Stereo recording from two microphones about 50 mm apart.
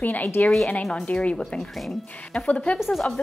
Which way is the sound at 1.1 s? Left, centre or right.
Left.